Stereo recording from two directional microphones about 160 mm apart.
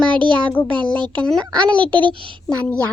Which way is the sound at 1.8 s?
30° right (ahead or behind).